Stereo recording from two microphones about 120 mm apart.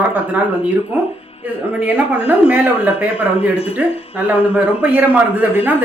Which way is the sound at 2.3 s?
15° right (ahead or behind).